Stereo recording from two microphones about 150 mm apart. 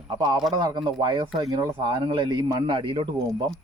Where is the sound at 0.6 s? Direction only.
30° right (ahead or behind).